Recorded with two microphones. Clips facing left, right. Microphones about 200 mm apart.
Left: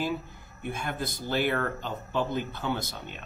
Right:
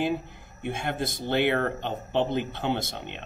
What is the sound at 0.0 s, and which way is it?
Speech, 25° right (ahead or behind).